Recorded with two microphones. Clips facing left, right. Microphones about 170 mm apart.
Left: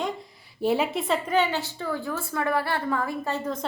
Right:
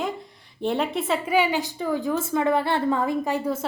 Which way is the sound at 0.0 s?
Centre (ahead or behind).